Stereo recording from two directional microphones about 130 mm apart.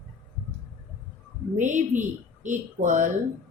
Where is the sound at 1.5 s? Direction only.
70° right (ahead or behind).